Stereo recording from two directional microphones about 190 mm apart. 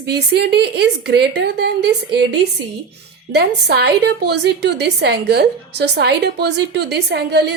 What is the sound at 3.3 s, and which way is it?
A woman's voice, 60° right (ahead or behind).